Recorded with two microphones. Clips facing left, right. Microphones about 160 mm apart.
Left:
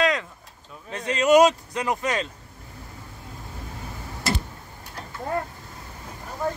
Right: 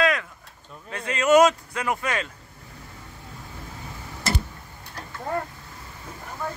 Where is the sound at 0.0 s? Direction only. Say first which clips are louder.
Even; 20° left (ahead or behind).